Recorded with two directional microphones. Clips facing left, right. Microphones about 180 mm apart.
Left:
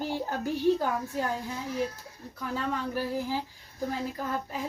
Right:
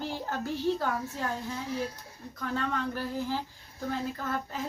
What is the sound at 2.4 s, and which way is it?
Speech, 10° left (ahead or behind).